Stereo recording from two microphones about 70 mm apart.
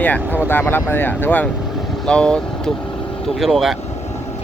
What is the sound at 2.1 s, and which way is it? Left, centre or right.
Speech, centre.